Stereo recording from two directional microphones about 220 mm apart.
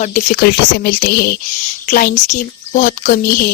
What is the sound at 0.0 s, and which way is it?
A woman's voice, 35° left (ahead or behind).